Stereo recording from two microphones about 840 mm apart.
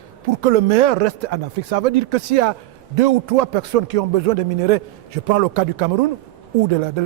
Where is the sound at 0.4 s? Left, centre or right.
Right.